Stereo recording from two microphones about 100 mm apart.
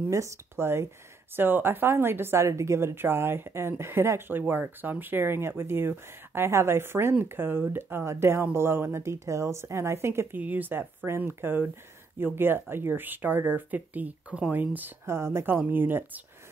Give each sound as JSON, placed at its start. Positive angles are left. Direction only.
{"t": 0.1, "sound": "a woman's voice", "side_deg": -25}